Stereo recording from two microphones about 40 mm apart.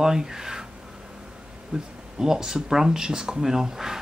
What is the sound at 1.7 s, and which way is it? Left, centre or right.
Speech, centre.